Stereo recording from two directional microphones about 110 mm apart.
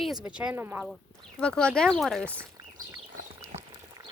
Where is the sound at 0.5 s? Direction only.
20° right (ahead or behind).